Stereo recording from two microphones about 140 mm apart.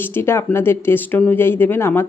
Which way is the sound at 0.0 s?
15° left (ahead or behind).